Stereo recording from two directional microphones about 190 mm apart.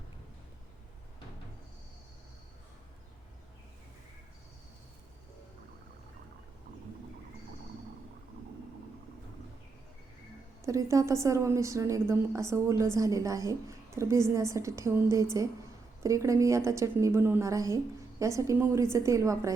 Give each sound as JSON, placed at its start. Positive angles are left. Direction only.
{"t": 10.6, "sound": "a woman's voice", "side_deg": -15}